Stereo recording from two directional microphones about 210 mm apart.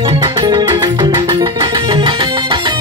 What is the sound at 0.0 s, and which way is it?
Music, 25° right (ahead or behind).